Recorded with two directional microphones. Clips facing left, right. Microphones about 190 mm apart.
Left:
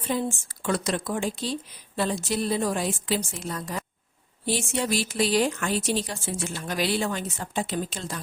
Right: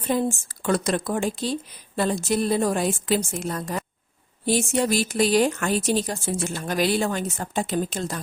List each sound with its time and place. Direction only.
0.1 s speech: 45° right (ahead or behind)